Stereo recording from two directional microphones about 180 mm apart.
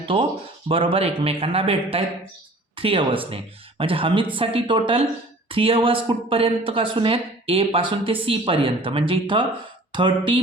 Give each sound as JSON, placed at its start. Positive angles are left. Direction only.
{"t": 0.0, "sound": "speech", "side_deg": -30}